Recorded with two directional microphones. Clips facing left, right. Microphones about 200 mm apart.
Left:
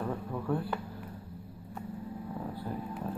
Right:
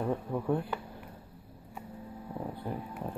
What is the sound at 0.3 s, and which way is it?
Speech, 15° right (ahead or behind).